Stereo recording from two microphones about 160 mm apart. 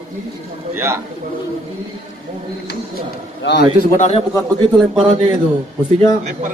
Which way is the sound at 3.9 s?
50° left (ahead or behind).